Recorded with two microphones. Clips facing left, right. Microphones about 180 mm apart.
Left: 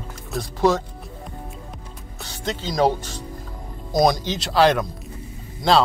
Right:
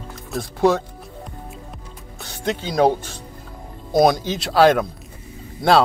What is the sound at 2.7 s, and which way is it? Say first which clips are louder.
Speech: right 2 dB; 55° right (ahead or behind).